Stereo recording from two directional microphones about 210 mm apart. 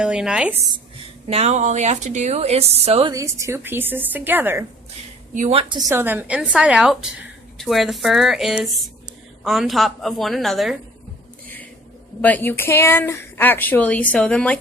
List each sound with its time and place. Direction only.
0.0 s a woman's voice: 5° right (ahead or behind)
1.3 s speech: 30° right (ahead or behind)
3.1 s a woman's voice: 15° right (ahead or behind)
5.3 s a woman's voice: 30° right (ahead or behind)
5.9 s a woman's voice: 10° right (ahead or behind)
12.2 s speech: 10° left (ahead or behind)